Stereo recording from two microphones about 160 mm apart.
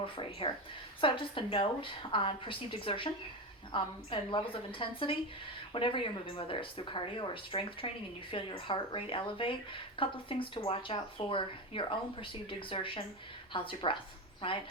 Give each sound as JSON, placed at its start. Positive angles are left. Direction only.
{"t": 0.0, "sound": "speech", "side_deg": 35}